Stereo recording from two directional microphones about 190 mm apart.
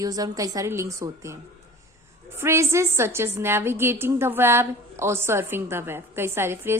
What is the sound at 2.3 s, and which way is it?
A woman's voice, 15° right (ahead or behind).